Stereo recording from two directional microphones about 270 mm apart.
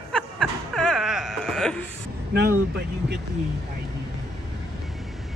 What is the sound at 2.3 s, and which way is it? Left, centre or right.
Speech, right.